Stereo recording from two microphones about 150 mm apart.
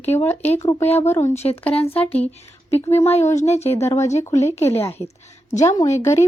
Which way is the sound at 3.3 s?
45° left (ahead or behind).